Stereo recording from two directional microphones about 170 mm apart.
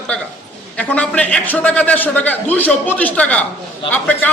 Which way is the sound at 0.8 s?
5° left (ahead or behind).